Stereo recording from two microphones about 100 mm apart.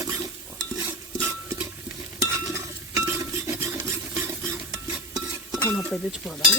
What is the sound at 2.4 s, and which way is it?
Stir, 25° right (ahead or behind).